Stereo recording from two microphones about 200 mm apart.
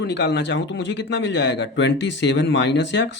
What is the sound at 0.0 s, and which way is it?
A man's voice, 60° left (ahead or behind).